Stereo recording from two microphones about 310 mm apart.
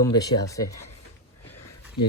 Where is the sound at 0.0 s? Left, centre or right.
Centre.